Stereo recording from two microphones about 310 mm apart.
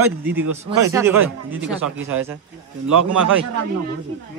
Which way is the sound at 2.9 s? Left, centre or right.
Right.